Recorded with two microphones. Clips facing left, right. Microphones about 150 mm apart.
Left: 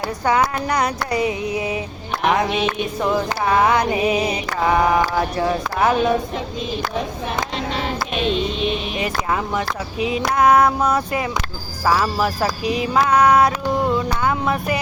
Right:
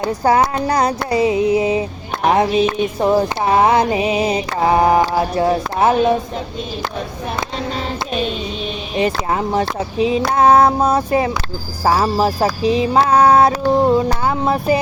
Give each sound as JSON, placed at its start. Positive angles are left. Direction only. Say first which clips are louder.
{"t": 0.3, "sound": "music", "louder": "right 4 dB", "side_deg": -30}
{"t": 2.2, "sound": "music", "louder": "right 5 dB", "side_deg": -35}
{"t": 9.0, "sound": "music", "louder": "right 4 dB", "side_deg": -30}
{"t": 11.8, "sound": "a sound", "louder": "right 3 dB", "side_deg": -30}